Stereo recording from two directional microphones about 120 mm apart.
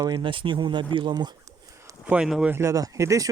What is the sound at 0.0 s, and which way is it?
Speech, 40° right (ahead or behind).